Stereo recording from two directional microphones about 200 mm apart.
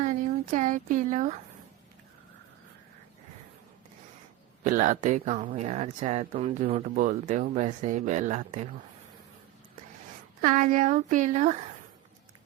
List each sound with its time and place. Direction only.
0.0 s speech: 40° right (ahead or behind)
4.6 s speech: 40° right (ahead or behind)
10.4 s speech: 40° right (ahead or behind)